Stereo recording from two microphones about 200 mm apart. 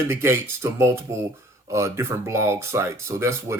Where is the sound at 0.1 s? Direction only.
10° right (ahead or behind).